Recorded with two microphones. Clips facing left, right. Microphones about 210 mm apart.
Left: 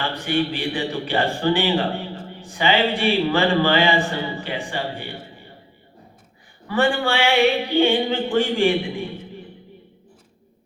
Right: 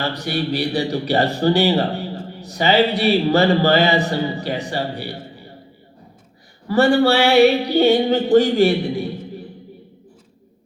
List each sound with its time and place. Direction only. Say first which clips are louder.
0.0 s a man's voice: even; 40° right (ahead or behind)
6.7 s a man's voice: right 6 dB; 40° right (ahead or behind)